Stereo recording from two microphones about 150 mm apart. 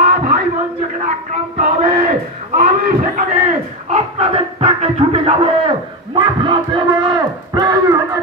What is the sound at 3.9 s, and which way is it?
Speech, 45° right (ahead or behind).